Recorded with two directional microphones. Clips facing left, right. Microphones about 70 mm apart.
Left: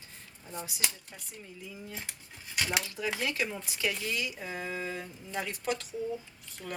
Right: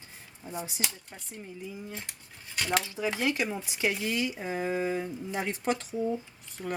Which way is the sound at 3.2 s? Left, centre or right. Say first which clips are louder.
Right 4 dB; right.